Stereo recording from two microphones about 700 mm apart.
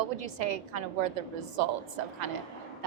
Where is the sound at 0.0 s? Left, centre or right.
Right.